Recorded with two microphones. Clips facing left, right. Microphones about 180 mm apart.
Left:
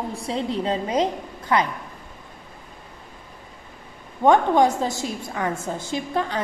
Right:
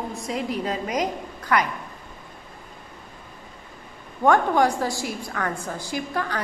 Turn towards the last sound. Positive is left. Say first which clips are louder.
# left 2 dB
turn(degrees=20)  # may be behind; listen again after turning